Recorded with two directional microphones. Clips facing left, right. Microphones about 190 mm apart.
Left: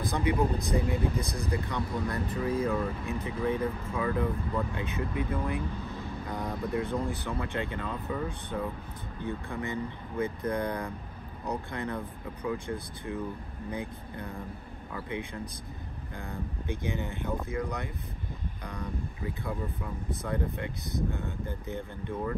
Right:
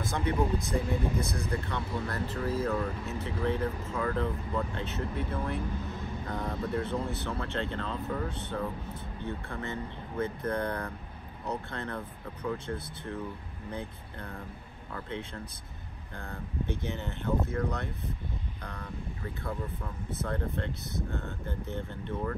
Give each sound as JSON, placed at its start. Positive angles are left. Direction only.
{"t": 0.2, "sound": "speech", "side_deg": 15}
{"t": 13.7, "sound": "speech", "side_deg": 15}